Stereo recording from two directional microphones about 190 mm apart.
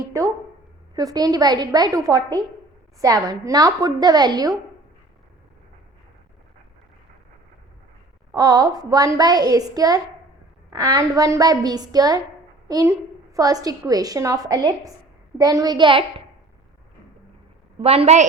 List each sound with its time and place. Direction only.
0.9 s a woman's voice: 20° right (ahead or behind)
8.3 s a woman's voice: 20° right (ahead or behind)
17.7 s a woman's voice: 30° right (ahead or behind)